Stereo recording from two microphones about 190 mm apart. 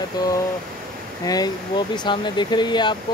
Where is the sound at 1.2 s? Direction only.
20° left (ahead or behind).